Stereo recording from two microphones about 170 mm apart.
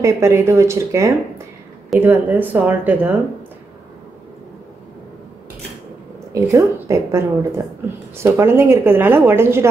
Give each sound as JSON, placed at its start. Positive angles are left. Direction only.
{"t": 0.0, "sound": "speech", "side_deg": -15}
{"t": 6.3, "sound": "speech", "side_deg": -15}